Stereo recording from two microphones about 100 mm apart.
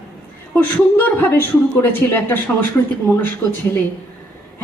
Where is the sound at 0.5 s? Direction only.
20° left (ahead or behind).